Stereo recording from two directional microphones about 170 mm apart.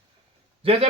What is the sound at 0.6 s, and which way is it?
Speech, 35° right (ahead or behind).